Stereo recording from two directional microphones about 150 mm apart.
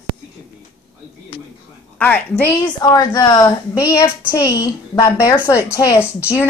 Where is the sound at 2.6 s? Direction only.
25° left (ahead or behind).